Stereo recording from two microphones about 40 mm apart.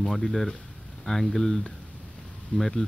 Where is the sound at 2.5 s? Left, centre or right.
Left.